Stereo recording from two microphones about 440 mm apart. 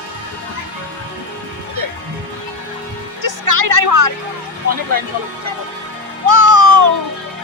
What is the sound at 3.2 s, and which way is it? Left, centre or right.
Music, right.